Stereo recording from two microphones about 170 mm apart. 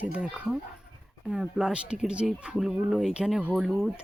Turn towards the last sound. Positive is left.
turn(degrees=0)  # may be behind; listen again after turning